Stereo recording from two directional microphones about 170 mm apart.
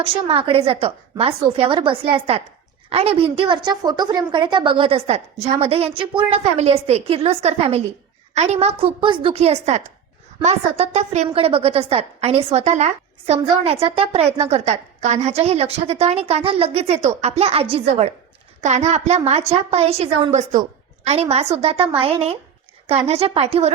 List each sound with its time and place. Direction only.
0.0 s a woman's voice: 35° right (ahead or behind)